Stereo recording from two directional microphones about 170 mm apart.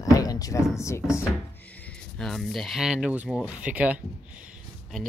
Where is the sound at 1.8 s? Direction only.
5° left (ahead or behind).